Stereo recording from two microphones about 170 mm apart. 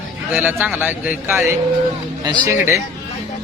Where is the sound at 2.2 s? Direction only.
25° right (ahead or behind).